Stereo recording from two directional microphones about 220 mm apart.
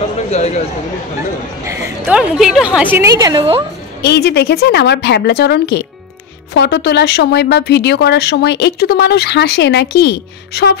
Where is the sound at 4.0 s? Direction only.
50° left (ahead or behind).